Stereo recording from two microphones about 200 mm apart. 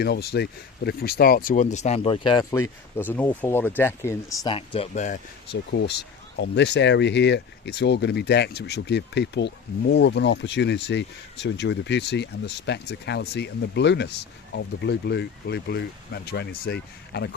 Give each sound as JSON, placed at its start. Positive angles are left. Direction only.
{"t": 0.0, "sound": "speech", "side_deg": 55}
{"t": 5.5, "sound": "speech", "side_deg": 55}